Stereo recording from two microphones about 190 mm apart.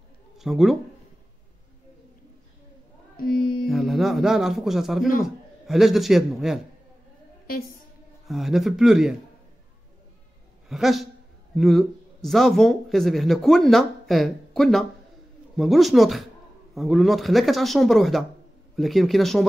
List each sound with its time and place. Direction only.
0.4 s speech: centre (ahead or behind)
3.2 s music: 50° left (ahead or behind)
3.6 s a sound: centre (ahead or behind)
5.2 s speech: centre (ahead or behind)
8.3 s speech: centre (ahead or behind)
10.7 s speech: centre (ahead or behind)